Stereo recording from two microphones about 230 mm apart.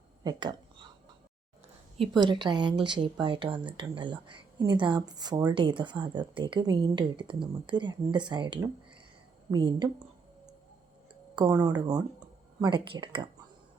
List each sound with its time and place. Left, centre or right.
0.2 s a sound: centre
2.0 s speech: centre
11.3 s speech: centre